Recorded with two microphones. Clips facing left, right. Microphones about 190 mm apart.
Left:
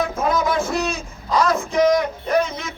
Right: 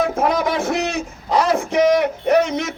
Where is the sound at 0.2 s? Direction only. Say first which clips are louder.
Right 1 dB; 65° right (ahead or behind).